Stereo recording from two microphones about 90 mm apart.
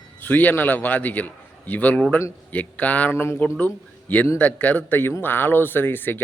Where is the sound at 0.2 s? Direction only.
20° left (ahead or behind).